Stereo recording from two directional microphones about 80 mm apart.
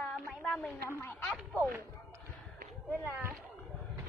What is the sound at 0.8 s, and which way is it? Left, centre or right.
Speech, left.